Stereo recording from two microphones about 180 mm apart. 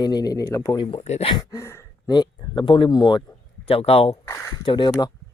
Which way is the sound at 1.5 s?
15° left (ahead or behind).